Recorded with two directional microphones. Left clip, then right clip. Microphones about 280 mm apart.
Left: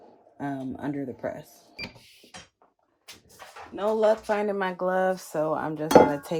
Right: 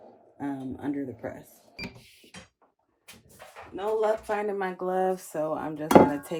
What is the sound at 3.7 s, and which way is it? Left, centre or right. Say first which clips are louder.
Speech: left 3 dB; left.